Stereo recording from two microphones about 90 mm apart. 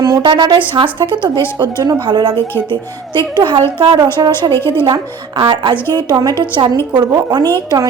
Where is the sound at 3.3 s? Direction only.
65° right (ahead or behind).